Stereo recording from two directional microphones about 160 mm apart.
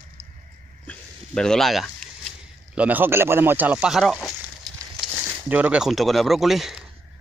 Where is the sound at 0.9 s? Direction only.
5° left (ahead or behind).